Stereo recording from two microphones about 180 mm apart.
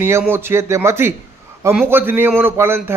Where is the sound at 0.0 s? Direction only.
10° right (ahead or behind).